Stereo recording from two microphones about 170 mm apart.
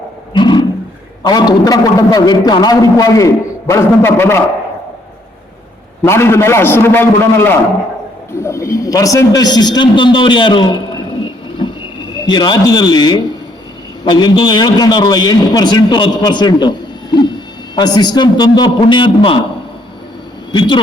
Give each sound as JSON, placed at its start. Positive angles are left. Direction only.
{"t": 0.3, "sound": "roaring cats", "side_deg": 25}
{"t": 1.2, "sound": "a man's voice", "side_deg": 25}
{"t": 6.1, "sound": "a man's voice", "side_deg": 15}
{"t": 11.4, "sound": "a sound", "side_deg": 30}
{"t": 12.1, "sound": "a man's voice", "side_deg": 25}
{"t": 20.5, "sound": "a man's voice", "side_deg": 25}